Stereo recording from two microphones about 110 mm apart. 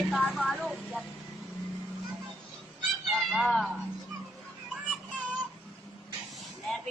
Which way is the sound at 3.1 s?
Centre (ahead or behind).